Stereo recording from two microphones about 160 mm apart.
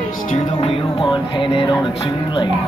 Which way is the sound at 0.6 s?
35° left (ahead or behind).